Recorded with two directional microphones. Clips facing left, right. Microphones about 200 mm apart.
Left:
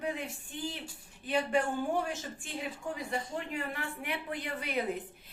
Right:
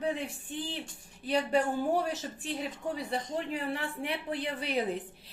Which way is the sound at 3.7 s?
30° right (ahead or behind).